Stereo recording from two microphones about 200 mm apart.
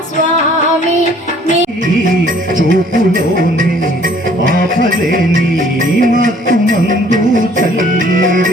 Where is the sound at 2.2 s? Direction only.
45° right (ahead or behind).